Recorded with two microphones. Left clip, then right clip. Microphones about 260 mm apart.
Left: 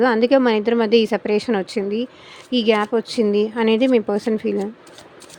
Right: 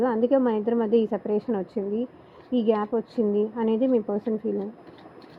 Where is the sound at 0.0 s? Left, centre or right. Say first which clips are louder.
Left 7 dB; left.